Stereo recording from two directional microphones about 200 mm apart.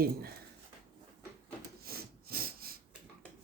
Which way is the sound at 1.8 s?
50° right (ahead or behind).